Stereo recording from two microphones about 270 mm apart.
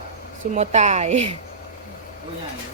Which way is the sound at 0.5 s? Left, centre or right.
Right.